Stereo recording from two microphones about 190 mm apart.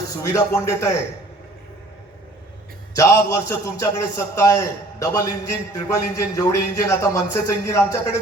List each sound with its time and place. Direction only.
0.2 s a man's voice: 15° left (ahead or behind)
2.9 s a man's voice: 15° left (ahead or behind)